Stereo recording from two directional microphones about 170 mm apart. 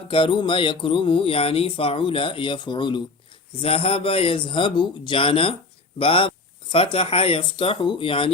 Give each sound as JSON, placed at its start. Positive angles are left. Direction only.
{"t": 0.1, "sound": "speech", "side_deg": 30}